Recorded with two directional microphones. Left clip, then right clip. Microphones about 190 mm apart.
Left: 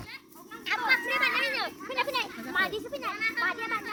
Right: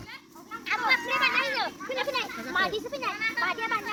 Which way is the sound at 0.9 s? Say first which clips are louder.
Right 1 dB; 65° left (ahead or behind).